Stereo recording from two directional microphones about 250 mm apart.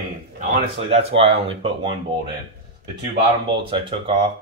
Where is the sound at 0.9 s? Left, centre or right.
Right.